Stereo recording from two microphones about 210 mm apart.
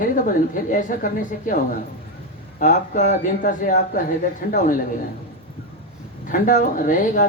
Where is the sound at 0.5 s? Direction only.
40° left (ahead or behind).